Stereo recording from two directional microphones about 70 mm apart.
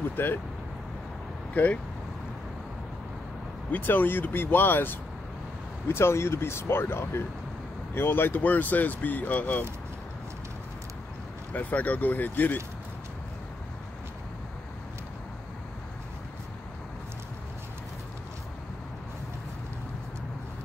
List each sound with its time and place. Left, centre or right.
0.1 s speech: left
1.5 s speech: left
3.7 s speech: left
11.5 s speech: left